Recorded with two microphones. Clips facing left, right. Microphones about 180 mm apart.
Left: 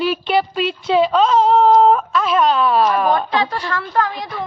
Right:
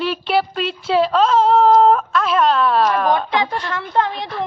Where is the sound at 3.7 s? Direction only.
20° right (ahead or behind).